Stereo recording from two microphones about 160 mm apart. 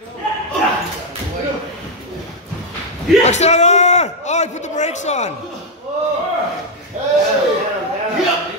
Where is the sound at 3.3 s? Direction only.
45° left (ahead or behind).